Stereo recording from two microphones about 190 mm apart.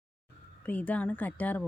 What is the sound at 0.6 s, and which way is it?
Speech, 10° left (ahead or behind).